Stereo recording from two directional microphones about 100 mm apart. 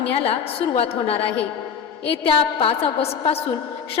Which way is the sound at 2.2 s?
65° left (ahead or behind).